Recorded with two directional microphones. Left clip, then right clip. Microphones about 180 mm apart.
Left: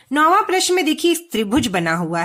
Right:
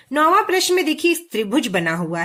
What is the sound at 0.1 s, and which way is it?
Speech, 25° left (ahead or behind).